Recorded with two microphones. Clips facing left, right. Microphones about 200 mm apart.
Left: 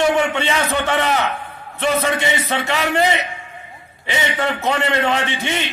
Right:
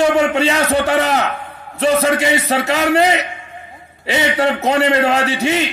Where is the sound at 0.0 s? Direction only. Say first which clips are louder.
Right 4 dB; 40° right (ahead or behind).